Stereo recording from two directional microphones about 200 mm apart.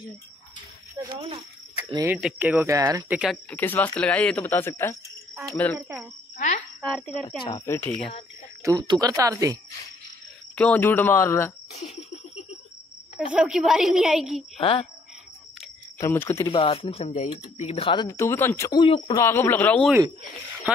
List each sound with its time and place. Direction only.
1.0 s speech: 25° right (ahead or behind)
2.0 s speech: 5° right (ahead or behind)
3.2 s speech: 5° left (ahead or behind)
6.3 s a sound: 40° left (ahead or behind)
6.8 s speech: 5° left (ahead or behind)
7.2 s speech: 25° left (ahead or behind)
7.6 s speech: 10° left (ahead or behind)
8.6 s speech: 20° right (ahead or behind)
10.5 s speech: 5° left (ahead or behind)
13.3 s a woman's voice: 5° right (ahead or behind)
14.6 s speech: 25° left (ahead or behind)
16.0 s speech: 10° left (ahead or behind)
16.4 s speech: 25° left (ahead or behind)
19.1 s speech: 10° left (ahead or behind)